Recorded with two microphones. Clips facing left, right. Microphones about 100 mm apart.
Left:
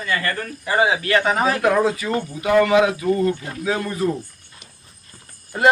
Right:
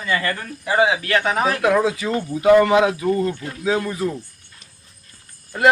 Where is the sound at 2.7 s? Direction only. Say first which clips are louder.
Even; 25° right (ahead or behind).